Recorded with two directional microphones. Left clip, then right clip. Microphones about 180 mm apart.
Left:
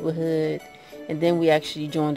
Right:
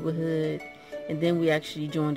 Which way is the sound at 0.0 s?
20° right (ahead or behind).